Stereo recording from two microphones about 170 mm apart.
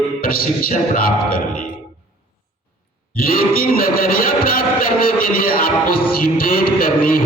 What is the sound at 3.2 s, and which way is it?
Music, 60° left (ahead or behind).